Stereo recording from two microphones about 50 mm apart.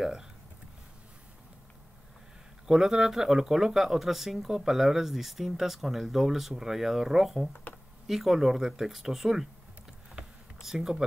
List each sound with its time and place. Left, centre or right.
0.0 s speech: centre
2.6 s speech: centre
10.2 s a sound: right
10.6 s speech: centre